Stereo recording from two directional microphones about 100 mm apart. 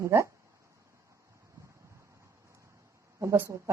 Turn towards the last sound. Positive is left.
turn(degrees=-30)  # may be behind; listen again after turning